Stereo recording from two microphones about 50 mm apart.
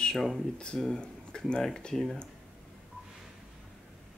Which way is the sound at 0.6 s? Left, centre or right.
Centre.